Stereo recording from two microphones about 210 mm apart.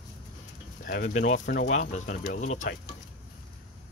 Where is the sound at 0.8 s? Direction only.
40° left (ahead or behind).